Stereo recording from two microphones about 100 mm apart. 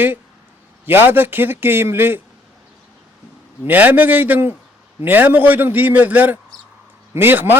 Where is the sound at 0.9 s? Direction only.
20° right (ahead or behind).